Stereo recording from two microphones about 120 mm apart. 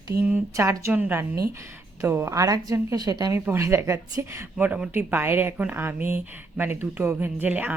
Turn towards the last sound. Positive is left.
turn(degrees=-15)  # may be behind; listen again after turning